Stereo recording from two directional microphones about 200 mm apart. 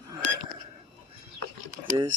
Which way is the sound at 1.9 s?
25° right (ahead or behind).